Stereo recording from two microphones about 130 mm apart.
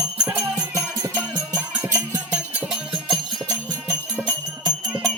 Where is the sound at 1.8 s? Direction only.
20° right (ahead or behind).